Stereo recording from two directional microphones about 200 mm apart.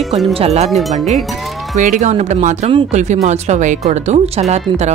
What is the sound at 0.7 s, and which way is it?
Speech, centre (ahead or behind).